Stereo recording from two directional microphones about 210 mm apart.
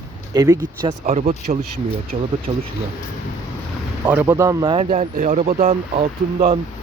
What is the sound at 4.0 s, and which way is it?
Speech, 10° right (ahead or behind).